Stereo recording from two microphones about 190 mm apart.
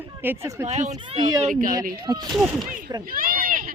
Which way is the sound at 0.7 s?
35° right (ahead or behind).